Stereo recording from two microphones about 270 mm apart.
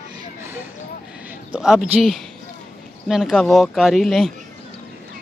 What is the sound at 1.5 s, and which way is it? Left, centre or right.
Speech, centre.